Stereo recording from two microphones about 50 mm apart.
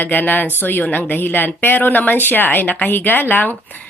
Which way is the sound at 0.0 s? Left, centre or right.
Left.